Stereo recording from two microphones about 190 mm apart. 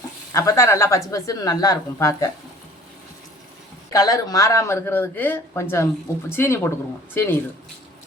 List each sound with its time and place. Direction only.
0.3 s speech: 15° left (ahead or behind)
3.8 s speech: 20° left (ahead or behind)